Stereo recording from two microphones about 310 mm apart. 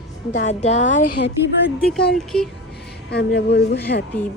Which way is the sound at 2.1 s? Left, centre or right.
Centre.